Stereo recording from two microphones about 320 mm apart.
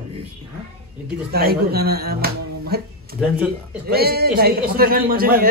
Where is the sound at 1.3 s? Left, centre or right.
Right.